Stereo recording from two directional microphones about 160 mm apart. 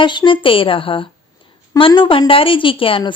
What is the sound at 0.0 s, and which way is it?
A woman's voice, 30° left (ahead or behind).